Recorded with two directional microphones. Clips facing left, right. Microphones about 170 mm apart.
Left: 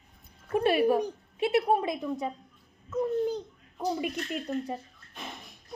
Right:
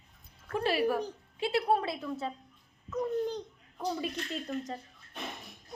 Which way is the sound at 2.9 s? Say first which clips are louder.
Left 4 dB; 5° left (ahead or behind).